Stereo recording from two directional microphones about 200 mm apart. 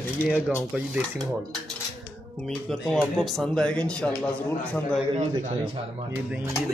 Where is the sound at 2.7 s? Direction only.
Centre (ahead or behind).